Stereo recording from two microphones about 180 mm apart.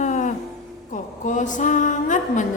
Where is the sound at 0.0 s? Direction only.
45° left (ahead or behind).